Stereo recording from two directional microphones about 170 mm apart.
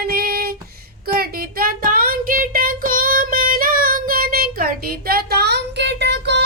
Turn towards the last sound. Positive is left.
turn(degrees=-90)